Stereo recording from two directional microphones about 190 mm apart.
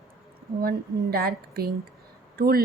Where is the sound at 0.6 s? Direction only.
55° right (ahead or behind).